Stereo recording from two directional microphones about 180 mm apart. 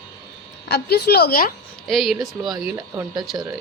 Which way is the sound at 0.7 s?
65° left (ahead or behind).